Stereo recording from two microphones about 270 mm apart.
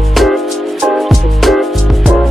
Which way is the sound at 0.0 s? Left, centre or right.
Centre.